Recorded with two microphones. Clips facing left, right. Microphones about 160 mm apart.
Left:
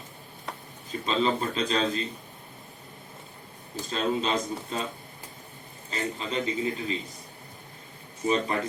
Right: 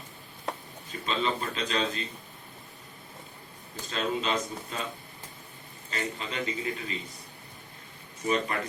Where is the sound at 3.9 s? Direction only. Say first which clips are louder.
Left 2 dB; 35° left (ahead or behind).